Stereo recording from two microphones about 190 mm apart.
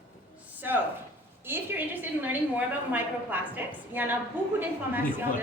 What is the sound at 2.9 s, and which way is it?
A woman's voice, 10° right (ahead or behind).